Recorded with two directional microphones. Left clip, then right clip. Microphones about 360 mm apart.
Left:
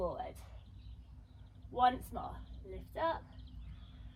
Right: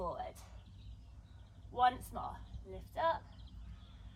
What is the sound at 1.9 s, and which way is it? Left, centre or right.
Speech, right.